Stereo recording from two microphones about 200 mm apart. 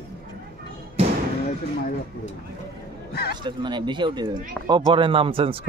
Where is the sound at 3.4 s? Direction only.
25° right (ahead or behind).